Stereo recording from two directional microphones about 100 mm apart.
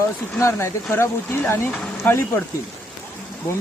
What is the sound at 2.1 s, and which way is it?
Speech, 25° left (ahead or behind).